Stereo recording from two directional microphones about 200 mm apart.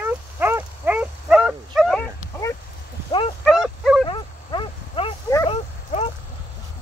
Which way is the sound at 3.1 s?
25° left (ahead or behind).